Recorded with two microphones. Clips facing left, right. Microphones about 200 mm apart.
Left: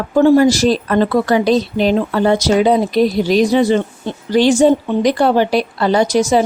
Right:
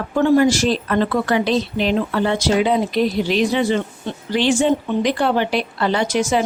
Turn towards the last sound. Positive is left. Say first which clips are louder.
# left 5 dB
turn(degrees=40)  # may be behind; listen again after turning